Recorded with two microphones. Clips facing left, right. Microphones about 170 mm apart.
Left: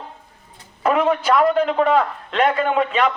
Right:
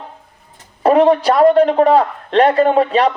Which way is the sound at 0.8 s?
35° right (ahead or behind).